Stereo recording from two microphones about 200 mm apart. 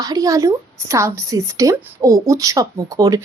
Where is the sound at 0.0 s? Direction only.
15° right (ahead or behind).